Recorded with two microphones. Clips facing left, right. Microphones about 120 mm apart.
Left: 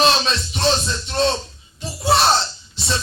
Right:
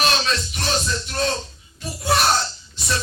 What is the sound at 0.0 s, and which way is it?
Music, 25° left (ahead or behind).